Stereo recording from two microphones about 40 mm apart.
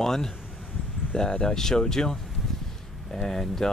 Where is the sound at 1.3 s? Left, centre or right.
Centre.